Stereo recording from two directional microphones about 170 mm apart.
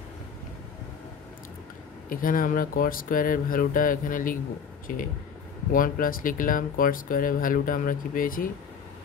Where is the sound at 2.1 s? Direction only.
55° left (ahead or behind).